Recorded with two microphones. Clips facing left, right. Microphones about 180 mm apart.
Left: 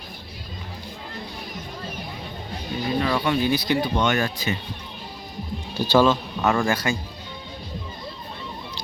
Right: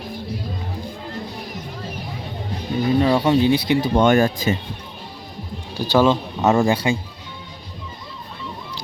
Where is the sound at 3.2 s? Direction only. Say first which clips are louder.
Right 6 dB; 30° right (ahead or behind).